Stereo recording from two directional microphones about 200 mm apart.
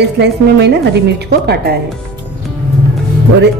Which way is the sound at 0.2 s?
55° right (ahead or behind).